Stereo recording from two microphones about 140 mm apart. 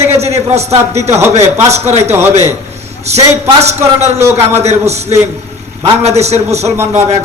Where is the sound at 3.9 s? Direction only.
55° right (ahead or behind).